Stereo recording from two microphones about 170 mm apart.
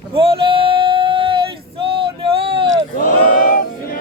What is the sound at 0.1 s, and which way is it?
Female singing, 35° right (ahead or behind).